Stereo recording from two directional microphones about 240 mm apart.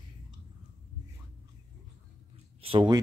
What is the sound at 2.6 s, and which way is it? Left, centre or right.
Speech, right.